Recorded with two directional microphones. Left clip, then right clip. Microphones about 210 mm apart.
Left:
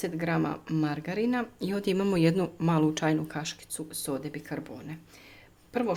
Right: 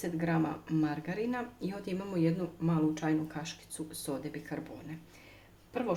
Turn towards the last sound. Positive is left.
turn(degrees=40)  # may be behind; listen again after turning